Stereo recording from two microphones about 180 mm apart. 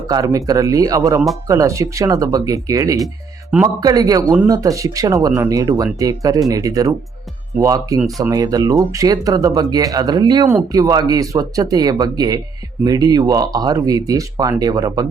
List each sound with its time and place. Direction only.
0.1 s speech: 20° right (ahead or behind)